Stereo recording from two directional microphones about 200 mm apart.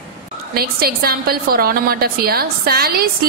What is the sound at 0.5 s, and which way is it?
A woman's voice, 50° right (ahead or behind).